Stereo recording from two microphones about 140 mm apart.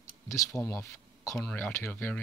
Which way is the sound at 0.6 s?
20° left (ahead or behind).